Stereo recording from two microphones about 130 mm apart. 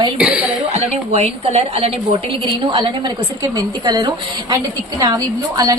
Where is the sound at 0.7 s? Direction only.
55° right (ahead or behind); by 5.8 s 30° right (ahead or behind).